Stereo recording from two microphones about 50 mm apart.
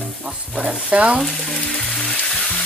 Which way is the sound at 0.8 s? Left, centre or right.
Right.